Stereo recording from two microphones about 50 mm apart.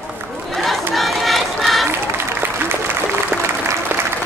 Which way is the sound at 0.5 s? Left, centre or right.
Centre.